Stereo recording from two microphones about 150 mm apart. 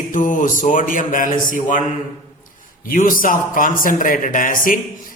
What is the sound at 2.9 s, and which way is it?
A man's voice, 65° left (ahead or behind).